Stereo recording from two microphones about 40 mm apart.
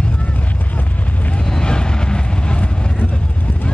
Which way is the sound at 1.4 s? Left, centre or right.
Centre.